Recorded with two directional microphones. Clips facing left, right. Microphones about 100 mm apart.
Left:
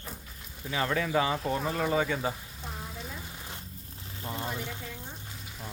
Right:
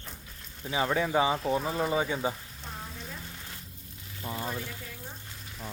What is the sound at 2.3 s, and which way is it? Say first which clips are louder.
Frying: even; centre (ahead or behind).